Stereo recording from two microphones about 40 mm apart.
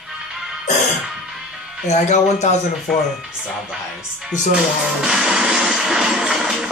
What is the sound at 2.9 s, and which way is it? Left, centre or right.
Speech, centre.